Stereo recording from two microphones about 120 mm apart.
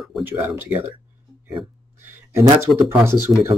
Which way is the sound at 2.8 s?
20° right (ahead or behind).